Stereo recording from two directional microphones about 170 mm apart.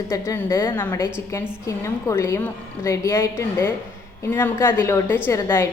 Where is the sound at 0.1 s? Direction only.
15° left (ahead or behind).